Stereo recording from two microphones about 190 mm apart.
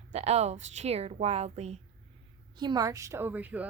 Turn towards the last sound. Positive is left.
turn(degrees=-10)  # may be behind; listen again after turning